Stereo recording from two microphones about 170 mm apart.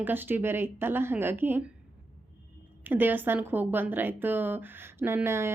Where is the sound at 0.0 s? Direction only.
10° right (ahead or behind).